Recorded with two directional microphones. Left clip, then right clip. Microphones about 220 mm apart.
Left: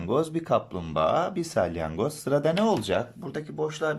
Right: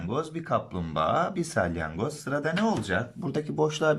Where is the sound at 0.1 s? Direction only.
15° left (ahead or behind).